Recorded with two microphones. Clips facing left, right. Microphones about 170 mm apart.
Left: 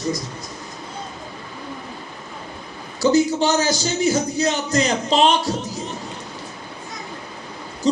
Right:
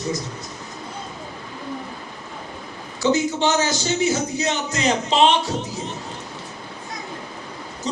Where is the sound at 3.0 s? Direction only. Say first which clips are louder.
Left 3 dB; 35° left (ahead or behind).